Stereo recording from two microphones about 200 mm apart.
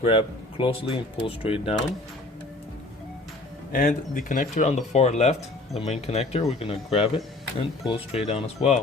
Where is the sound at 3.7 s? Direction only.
40° left (ahead or behind).